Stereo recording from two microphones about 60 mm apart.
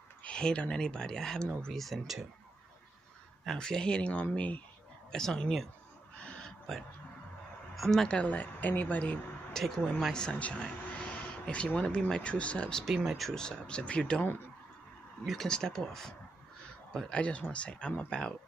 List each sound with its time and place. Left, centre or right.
0.2 s speech: centre
3.5 s speech: centre
5.1 s speech: centre
6.1 s owl: centre
7.7 s speech: centre
8.2 s speech: left
9.6 s speech: centre
10.3 s speech: left
12.8 s speech: centre
13.2 s speech: centre
15.4 s speech: centre